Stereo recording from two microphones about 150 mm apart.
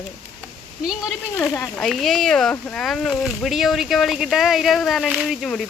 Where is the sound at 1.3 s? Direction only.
15° left (ahead or behind).